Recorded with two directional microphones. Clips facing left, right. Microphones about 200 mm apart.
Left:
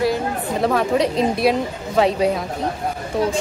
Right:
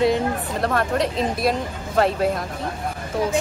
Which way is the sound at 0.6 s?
Centre (ahead or behind).